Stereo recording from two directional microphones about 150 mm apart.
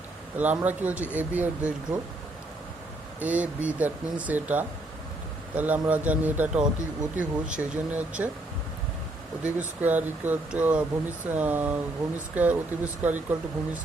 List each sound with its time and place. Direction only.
0.3 s speech: 10° right (ahead or behind)
3.2 s speech: 10° right (ahead or behind)
9.4 s speech: 10° right (ahead or behind)